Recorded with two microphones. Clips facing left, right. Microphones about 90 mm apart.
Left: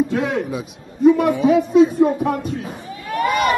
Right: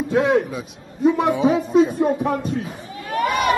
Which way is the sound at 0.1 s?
20° right (ahead or behind).